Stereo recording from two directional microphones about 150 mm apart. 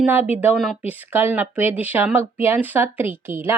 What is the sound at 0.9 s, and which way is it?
A woman's voice, 10° right (ahead or behind).